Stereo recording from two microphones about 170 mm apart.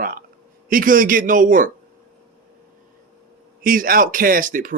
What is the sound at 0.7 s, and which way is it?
A man's voice, 55° right (ahead or behind).